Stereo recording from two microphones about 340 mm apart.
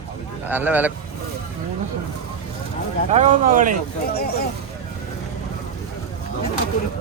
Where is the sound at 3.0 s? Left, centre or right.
Right.